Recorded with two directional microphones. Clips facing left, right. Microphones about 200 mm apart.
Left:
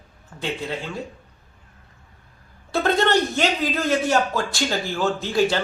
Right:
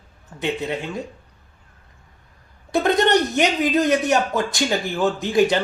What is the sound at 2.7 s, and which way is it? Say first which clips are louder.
Speech: right 2 dB; 20° right (ahead or behind).